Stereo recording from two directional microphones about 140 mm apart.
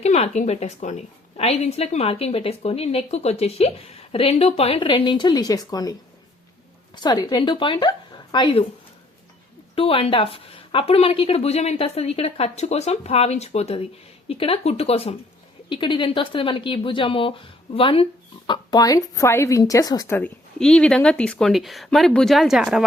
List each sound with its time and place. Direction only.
0.0 s a woman's voice: 50° left (ahead or behind); by 8.6 s 35° left (ahead or behind)
9.7 s a woman's voice: 40° left (ahead or behind)
15.7 s speech: 35° left (ahead or behind)
20.1 s speech: 15° left (ahead or behind); by 22.8 s 5° right (ahead or behind)